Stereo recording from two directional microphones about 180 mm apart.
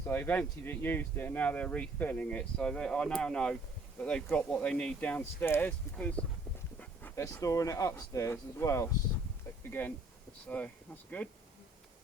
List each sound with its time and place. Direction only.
0.0 s speech: 10° left (ahead or behind)